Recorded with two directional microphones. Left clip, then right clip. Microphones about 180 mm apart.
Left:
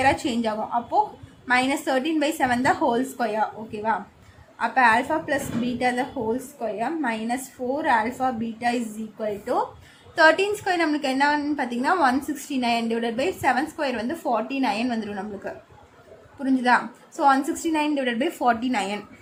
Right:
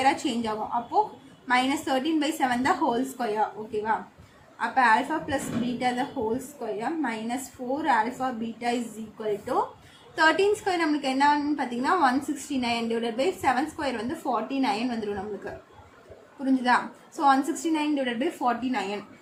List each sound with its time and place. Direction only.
0.0 s a woman's voice: 40° left (ahead or behind)
16.5 s a woman's voice: 40° left (ahead or behind)